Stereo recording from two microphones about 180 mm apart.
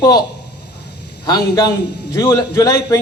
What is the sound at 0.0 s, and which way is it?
Speech, 20° left (ahead or behind).